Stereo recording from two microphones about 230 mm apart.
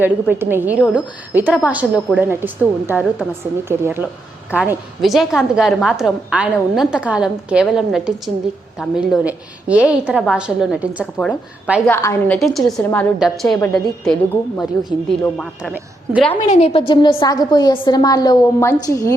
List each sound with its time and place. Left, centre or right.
0.0 s a woman's voice: centre
15.2 s a woman's voice: centre
16.3 s a woman's voice: left